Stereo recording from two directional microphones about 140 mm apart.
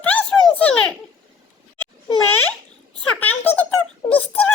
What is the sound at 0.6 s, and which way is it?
Children playing, 5° left (ahead or behind).